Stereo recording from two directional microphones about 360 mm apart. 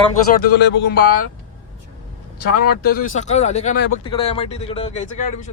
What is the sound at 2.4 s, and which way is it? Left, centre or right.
Speech, left.